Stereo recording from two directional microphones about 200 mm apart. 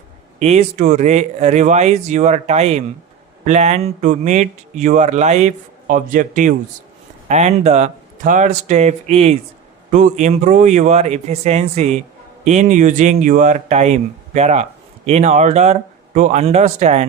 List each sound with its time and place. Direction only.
0.3 s speech: 35° right (ahead or behind)